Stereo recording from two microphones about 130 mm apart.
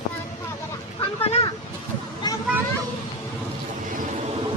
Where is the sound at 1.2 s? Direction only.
45° left (ahead or behind).